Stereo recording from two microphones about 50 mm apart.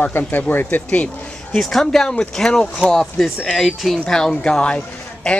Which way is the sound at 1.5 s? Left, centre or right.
Centre.